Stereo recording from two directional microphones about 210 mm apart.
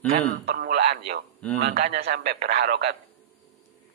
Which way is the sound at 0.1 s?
45° right (ahead or behind).